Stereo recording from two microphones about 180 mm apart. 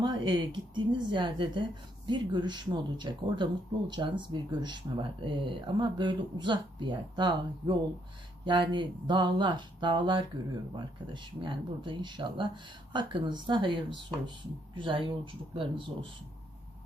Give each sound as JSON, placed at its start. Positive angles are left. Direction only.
{"t": 0.0, "sound": "speech", "side_deg": -25}